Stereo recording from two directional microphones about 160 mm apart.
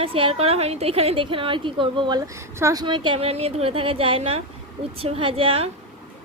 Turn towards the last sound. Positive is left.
turn(degrees=-35)  # may be behind; listen again after turning